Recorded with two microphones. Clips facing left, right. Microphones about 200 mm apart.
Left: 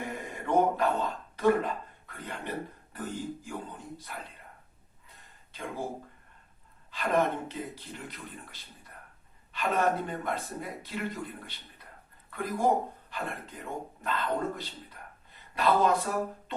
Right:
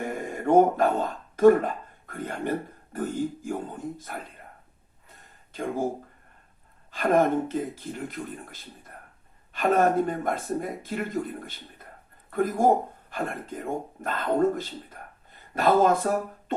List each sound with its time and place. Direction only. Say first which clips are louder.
0.0 s speech: right 7 dB; 45° right (ahead or behind)
5.0 s a sound: right 4 dB; 50° right (ahead or behind)
6.9 s speech: right 6 dB; 45° right (ahead or behind)